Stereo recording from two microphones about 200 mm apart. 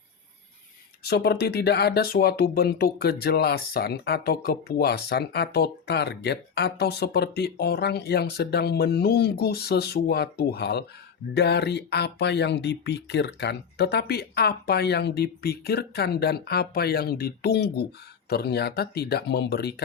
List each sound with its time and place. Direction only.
1.0 s speech: 55° left (ahead or behind)